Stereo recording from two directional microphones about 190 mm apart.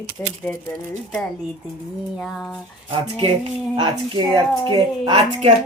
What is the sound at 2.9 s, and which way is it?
Speech, 25° right (ahead or behind).